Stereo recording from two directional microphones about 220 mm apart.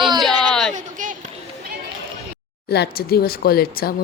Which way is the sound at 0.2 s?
Centre (ahead or behind).